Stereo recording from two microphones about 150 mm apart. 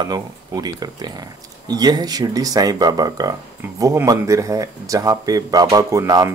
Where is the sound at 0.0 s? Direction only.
25° right (ahead or behind).